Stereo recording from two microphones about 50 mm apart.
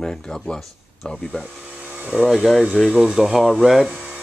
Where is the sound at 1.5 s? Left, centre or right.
Right.